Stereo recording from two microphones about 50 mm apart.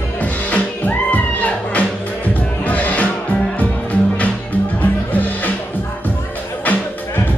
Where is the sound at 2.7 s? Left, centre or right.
Left.